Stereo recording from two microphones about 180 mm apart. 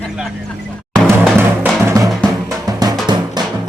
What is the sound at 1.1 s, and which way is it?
Music, 15° right (ahead or behind).